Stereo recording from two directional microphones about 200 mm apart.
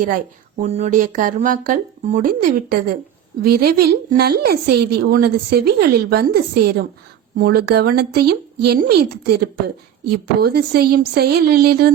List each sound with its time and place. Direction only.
0.6 s speech: 35° right (ahead or behind); by 11.9 s 50° right (ahead or behind)